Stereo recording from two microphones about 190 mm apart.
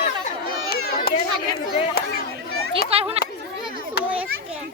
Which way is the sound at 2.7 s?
30° right (ahead or behind).